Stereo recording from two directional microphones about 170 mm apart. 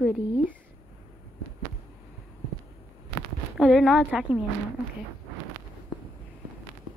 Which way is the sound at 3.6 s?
Centre (ahead or behind).